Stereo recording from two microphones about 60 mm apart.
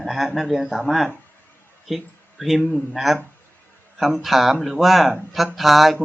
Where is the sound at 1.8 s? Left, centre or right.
Centre.